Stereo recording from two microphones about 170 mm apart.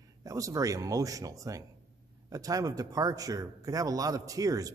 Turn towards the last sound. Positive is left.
turn(degrees=-20)  # may be behind; listen again after turning